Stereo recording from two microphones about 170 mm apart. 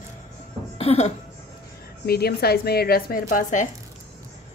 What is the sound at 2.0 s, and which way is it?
A woman's voice, 65° left (ahead or behind).